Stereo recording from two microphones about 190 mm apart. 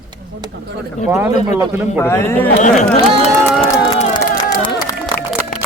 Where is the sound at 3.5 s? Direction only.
5° right (ahead or behind).